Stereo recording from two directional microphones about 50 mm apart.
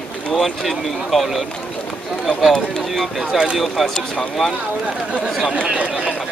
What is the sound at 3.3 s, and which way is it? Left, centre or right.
Speech, centre.